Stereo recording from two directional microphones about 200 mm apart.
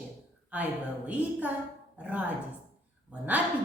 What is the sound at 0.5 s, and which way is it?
A woman's voice, 5° right (ahead or behind).